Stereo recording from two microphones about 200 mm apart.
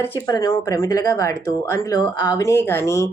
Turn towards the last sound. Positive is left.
turn(degrees=15)  # may be behind; listen again after turning